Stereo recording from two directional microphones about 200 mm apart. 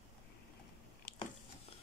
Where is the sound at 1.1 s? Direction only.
45° left (ahead or behind).